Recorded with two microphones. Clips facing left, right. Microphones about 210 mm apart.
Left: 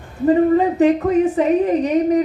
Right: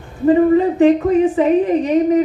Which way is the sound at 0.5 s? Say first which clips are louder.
Right 2 dB; 40° left (ahead or behind).